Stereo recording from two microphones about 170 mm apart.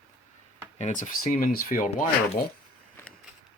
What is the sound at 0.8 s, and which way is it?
Speech, 50° left (ahead or behind).